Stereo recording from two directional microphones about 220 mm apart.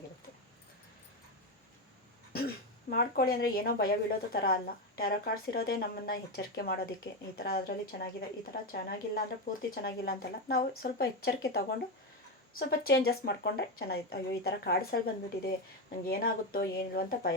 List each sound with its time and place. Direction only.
2.3 s speech: 45° left (ahead or behind)